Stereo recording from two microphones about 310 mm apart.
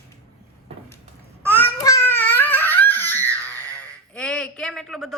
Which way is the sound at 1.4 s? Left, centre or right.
Centre.